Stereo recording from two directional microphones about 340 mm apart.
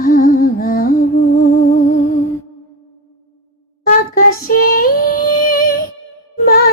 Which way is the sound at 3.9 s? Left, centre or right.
Left.